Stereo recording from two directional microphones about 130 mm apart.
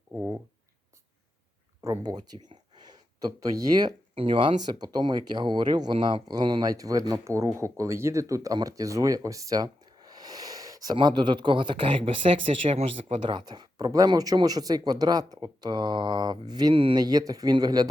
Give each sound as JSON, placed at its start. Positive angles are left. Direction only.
{"t": 1.8, "sound": "speech", "side_deg": -25}
{"t": 4.1, "sound": "speech", "side_deg": -40}
{"t": 13.2, "sound": "speech", "side_deg": -35}